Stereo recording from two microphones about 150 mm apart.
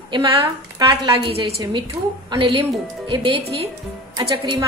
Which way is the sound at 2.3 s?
35° right (ahead or behind).